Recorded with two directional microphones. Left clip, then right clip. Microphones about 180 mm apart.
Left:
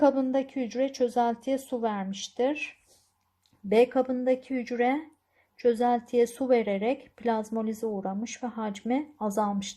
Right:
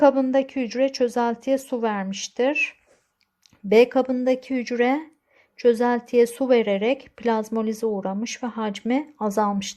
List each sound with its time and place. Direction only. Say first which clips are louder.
0.0 s a woman's voice: right 6 dB; 15° right (ahead or behind)